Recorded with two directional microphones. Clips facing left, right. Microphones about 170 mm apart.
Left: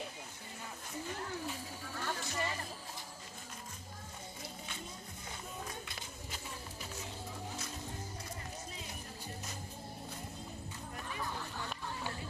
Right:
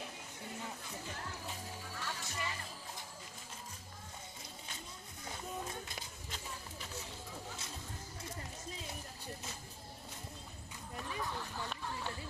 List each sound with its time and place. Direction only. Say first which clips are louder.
2.0 s music: left 6 dB; 50° left (ahead or behind)